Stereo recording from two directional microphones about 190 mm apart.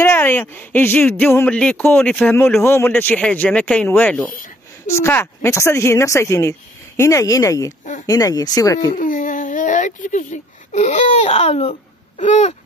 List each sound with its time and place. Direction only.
0.0 s speech: 10° left (ahead or behind)
8.9 s speech: 45° left (ahead or behind)
12.2 s a sound: 40° left (ahead or behind)